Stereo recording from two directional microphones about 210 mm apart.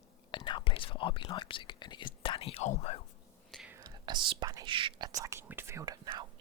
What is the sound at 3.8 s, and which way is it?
Speech, 20° right (ahead or behind).